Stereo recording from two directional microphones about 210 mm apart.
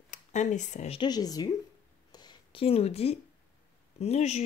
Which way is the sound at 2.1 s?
20° left (ahead or behind).